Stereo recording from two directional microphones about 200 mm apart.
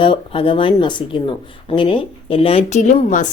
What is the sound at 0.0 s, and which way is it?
A woman's voice, 25° left (ahead or behind).